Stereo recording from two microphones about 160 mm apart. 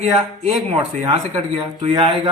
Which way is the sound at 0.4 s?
35° right (ahead or behind).